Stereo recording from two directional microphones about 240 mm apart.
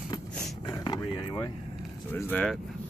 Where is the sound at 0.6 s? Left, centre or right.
Centre.